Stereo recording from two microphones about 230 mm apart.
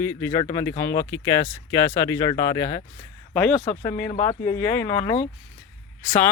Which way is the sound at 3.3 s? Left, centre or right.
Centre.